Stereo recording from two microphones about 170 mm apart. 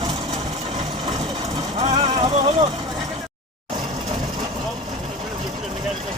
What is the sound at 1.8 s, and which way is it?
Speech, 35° right (ahead or behind).